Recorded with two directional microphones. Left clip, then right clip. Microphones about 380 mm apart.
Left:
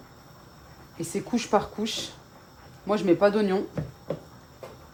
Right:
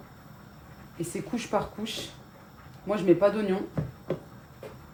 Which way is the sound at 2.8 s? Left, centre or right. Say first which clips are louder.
Left 1 dB; left.